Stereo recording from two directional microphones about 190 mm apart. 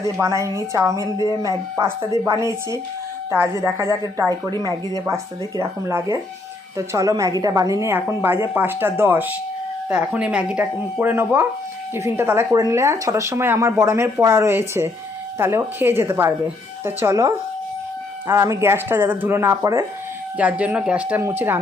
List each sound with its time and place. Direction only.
0.2 s a woman's voice: 15° right (ahead or behind)